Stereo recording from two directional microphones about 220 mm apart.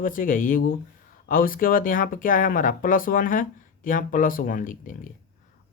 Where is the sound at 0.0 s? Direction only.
40° left (ahead or behind).